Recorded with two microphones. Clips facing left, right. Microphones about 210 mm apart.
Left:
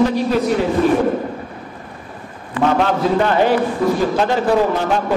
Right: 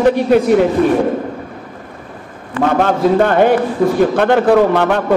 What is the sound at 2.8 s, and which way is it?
A man's voice, 50° right (ahead or behind).